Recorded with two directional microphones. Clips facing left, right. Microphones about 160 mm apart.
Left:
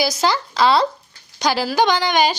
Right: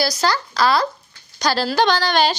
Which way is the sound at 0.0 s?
20° left (ahead or behind).